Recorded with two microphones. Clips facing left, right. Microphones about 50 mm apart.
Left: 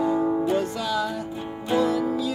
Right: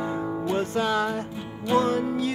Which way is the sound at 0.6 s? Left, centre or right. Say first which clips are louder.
Right 1 dB; right.